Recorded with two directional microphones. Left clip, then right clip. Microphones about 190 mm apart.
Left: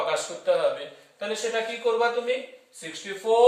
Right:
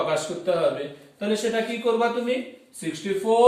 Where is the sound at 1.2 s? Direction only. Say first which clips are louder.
Right 3 dB; 10° left (ahead or behind).